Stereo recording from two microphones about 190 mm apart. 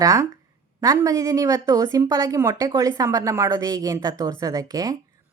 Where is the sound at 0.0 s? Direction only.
15° right (ahead or behind).